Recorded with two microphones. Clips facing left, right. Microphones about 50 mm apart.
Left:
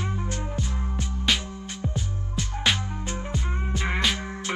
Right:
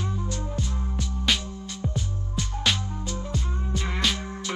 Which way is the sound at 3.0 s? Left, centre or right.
Left.